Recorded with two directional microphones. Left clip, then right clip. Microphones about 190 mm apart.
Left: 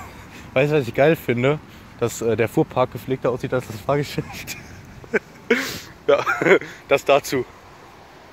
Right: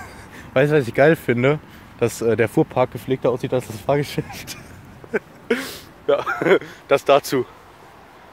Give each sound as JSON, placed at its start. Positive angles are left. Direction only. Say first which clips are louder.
{"t": 0.0, "sound": "speech", "louder": "right 1 dB", "side_deg": -20}
{"t": 5.1, "sound": "a sound", "louder": "left 2 dB", "side_deg": 5}
{"t": 6.9, "sound": "speech", "louder": "right 1 dB", "side_deg": -15}